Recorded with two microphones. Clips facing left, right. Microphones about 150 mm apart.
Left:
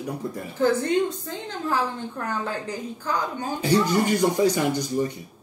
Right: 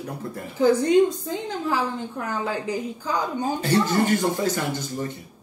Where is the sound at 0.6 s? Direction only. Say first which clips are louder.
Right 4 dB; 15° right (ahead or behind).